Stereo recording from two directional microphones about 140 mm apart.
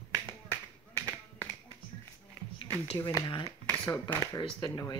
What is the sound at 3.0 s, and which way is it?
Speech, 30° left (ahead or behind).